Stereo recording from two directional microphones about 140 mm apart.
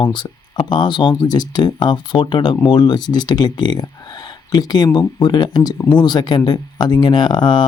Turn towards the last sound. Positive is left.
turn(degrees=30)  # may be behind; listen again after turning